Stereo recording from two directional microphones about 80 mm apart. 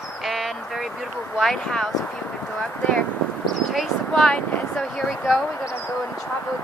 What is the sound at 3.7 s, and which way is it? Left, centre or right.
Speech, centre.